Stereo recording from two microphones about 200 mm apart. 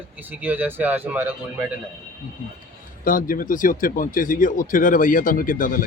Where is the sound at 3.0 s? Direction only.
45° left (ahead or behind).